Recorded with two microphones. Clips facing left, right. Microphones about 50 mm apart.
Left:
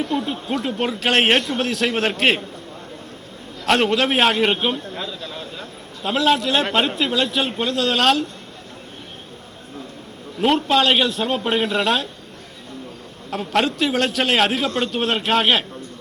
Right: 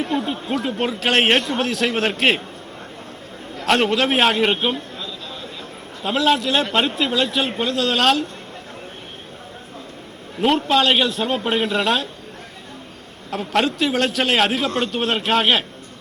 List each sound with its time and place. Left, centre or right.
0.0 s speech: right
0.3 s a man's voice: centre
3.7 s a man's voice: centre
6.0 s a man's voice: centre
10.4 s a man's voice: centre
13.3 s a man's voice: centre